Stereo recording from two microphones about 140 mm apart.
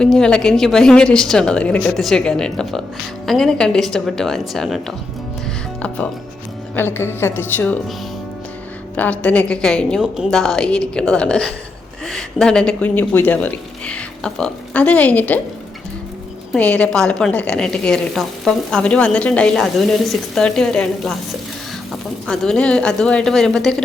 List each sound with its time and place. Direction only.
0.0 s a woman's voice: 5° left (ahead or behind)
6.7 s speech: 15° left (ahead or behind)
9.0 s a woman's voice: 10° left (ahead or behind)
16.5 s a woman's voice: 10° left (ahead or behind)
22.3 s a woman's voice: 5° left (ahead or behind)